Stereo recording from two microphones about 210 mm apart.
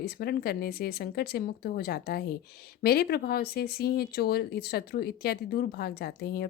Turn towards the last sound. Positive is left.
turn(degrees=50)  # may be behind; listen again after turning